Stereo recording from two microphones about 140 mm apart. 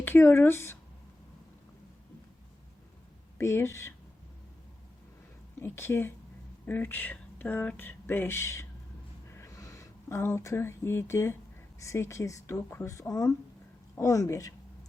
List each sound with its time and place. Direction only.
0.0 s speech: 15° left (ahead or behind)
3.3 s speech: 20° left (ahead or behind)
5.5 s speech: 15° left (ahead or behind)
9.3 s a sound: 20° left (ahead or behind)
11.8 s speech: 20° left (ahead or behind)